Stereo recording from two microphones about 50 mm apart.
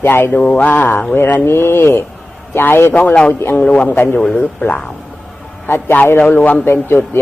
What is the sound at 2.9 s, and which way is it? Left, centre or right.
Speech, left.